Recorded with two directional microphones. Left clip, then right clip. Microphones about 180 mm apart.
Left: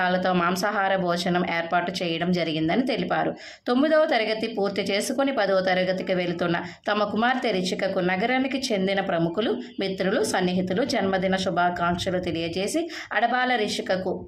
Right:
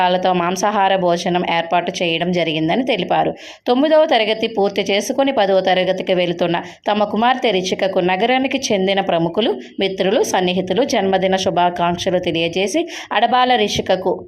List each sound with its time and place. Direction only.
0.0 s speech: 20° right (ahead or behind)